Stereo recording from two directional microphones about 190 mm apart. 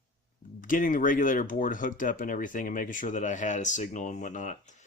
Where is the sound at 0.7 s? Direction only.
45° left (ahead or behind).